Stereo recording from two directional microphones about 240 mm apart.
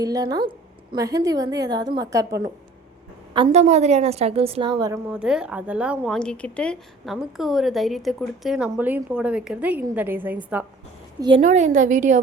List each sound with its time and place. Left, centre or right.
0.0 s a woman's voice: centre
3.3 s a woman's voice: right; by 10.3 s centre
11.4 s a woman's voice: right